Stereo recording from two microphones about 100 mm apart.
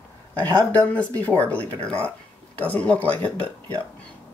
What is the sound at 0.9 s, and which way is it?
Speech, 15° left (ahead or behind).